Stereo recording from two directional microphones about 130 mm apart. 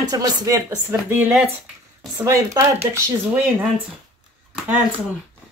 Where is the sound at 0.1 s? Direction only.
30° right (ahead or behind).